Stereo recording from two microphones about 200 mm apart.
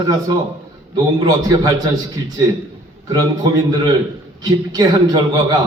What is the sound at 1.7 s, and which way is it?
Speech, 20° right (ahead or behind).